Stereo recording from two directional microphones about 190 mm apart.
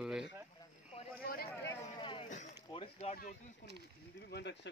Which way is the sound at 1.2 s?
50° left (ahead or behind).